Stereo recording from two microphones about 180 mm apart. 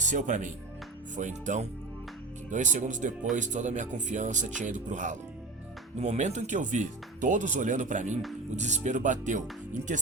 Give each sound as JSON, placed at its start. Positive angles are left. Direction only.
{"t": 0.0, "sound": "speech", "side_deg": -45}